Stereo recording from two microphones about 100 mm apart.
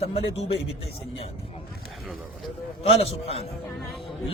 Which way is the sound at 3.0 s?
90° left.